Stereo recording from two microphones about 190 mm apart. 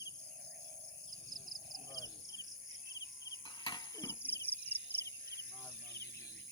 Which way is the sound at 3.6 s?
20° left (ahead or behind).